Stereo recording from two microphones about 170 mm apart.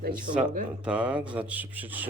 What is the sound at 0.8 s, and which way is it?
Speech, 5° right (ahead or behind).